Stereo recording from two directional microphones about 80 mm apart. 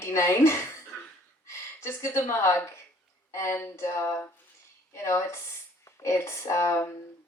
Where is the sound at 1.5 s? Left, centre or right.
Left.